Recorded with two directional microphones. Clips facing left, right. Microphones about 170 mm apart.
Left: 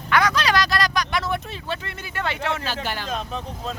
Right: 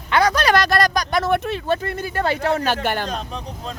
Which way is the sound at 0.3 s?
55° right (ahead or behind).